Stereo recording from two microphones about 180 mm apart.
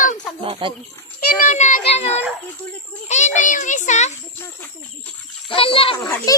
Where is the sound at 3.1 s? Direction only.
40° left (ahead or behind).